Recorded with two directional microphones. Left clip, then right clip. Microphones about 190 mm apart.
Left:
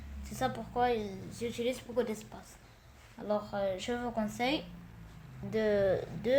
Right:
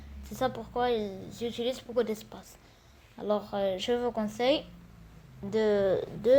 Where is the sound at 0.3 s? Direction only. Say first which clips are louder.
Right 3 dB; 25° right (ahead or behind).